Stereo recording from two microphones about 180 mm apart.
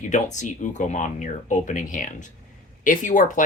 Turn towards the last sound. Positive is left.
turn(degrees=45)  # may be behind; listen again after turning